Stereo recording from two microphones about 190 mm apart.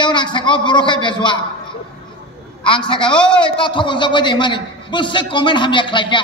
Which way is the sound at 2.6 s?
25° left (ahead or behind).